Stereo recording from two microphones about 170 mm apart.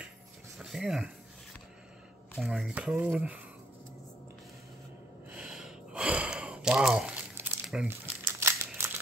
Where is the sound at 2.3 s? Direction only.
5° right (ahead or behind).